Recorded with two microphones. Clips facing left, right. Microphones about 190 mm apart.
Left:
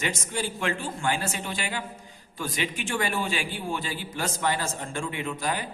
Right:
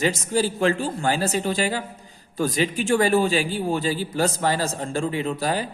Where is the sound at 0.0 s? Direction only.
40° right (ahead or behind).